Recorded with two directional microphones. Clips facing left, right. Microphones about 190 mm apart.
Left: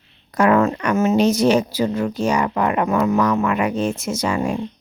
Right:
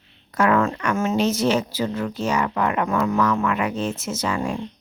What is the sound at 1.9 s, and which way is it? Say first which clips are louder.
Speech: left 4 dB; 25° left (ahead or behind).